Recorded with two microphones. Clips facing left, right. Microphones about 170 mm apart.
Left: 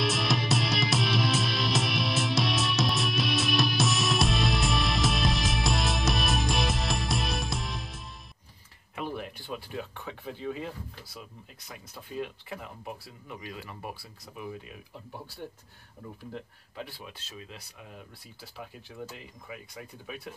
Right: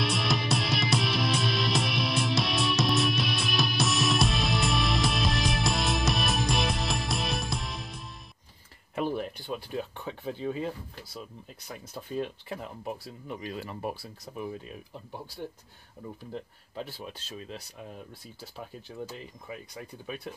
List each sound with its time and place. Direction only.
0.0 s music: centre (ahead or behind)
8.9 s a sound: 35° right (ahead or behind)
11.9 s speech: 40° right (ahead or behind)
16.3 s speech: 35° right (ahead or behind)